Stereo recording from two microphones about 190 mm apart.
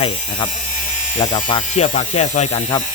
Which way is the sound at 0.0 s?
25° left (ahead or behind).